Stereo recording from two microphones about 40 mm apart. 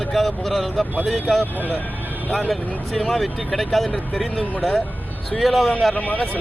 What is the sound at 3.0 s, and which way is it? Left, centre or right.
Speech, centre.